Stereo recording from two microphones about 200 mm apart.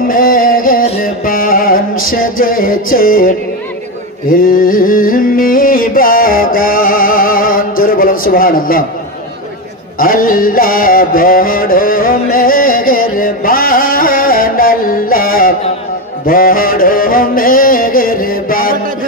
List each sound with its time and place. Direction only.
0.1 s music: 45° left (ahead or behind)
4.3 s a sound: 45° left (ahead or behind)
9.9 s mantra: 45° left (ahead or behind)
16.3 s music: 45° left (ahead or behind)